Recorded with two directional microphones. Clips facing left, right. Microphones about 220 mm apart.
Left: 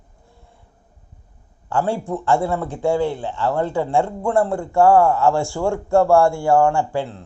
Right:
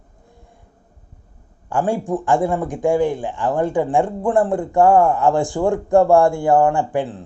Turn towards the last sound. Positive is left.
turn(degrees=-20)  # may be behind; listen again after turning